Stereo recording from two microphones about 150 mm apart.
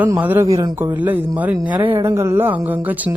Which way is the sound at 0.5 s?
25° right (ahead or behind).